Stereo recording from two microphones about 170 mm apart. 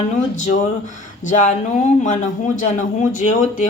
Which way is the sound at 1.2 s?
45° left (ahead or behind).